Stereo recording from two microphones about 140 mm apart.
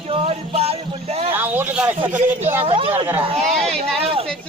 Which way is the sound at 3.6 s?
5° left (ahead or behind).